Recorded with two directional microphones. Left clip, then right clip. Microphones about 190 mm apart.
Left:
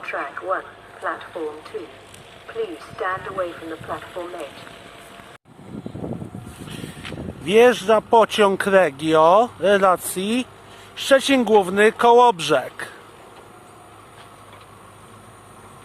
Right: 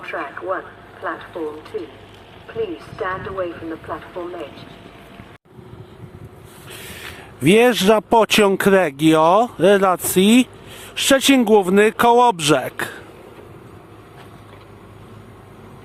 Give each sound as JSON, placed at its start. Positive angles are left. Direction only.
{"t": 0.0, "sound": "speech", "side_deg": 5}
{"t": 2.5, "sound": "speech", "side_deg": 5}
{"t": 7.4, "sound": "speech", "side_deg": -35}